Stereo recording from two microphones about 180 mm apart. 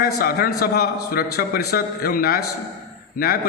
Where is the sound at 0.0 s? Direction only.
55° left (ahead or behind).